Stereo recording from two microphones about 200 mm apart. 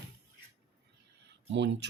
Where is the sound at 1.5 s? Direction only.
60° right (ahead or behind).